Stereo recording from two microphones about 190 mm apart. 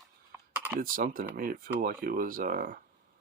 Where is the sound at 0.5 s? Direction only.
10° right (ahead or behind).